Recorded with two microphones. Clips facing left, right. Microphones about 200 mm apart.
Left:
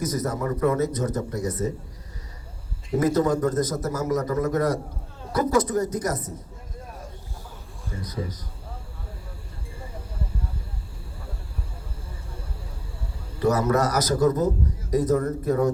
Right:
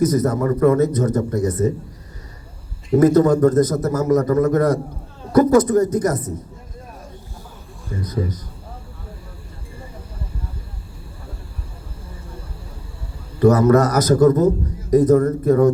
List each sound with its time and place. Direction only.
0.0 s a man's voice: 55° right (ahead or behind)
3.0 s a man's voice: 60° right (ahead or behind)
8.0 s a man's voice: 55° right (ahead or behind)
13.4 s a man's voice: 55° right (ahead or behind)